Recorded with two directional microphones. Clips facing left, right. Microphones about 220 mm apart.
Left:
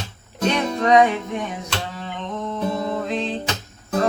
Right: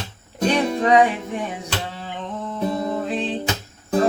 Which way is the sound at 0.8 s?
30° right (ahead or behind).